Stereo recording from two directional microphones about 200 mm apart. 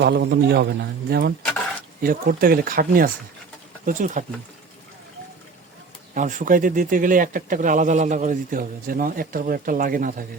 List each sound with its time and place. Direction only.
0.0 s a man's voice: 55° right (ahead or behind); by 4.3 s 40° right (ahead or behind)
6.1 s a man's voice: 40° right (ahead or behind)